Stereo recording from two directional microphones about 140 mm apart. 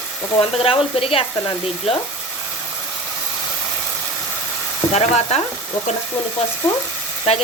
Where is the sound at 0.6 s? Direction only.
40° left (ahead or behind).